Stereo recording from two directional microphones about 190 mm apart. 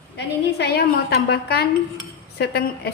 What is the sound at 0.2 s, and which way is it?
A woman's voice, 60° left (ahead or behind).